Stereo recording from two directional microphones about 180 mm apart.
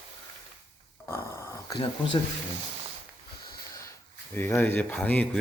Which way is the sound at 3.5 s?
20° left (ahead or behind).